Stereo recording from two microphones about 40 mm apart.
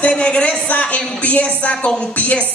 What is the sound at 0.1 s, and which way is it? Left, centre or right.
Speech, left.